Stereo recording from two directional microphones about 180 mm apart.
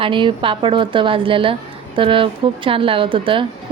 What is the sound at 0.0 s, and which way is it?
Speech, 25° right (ahead or behind).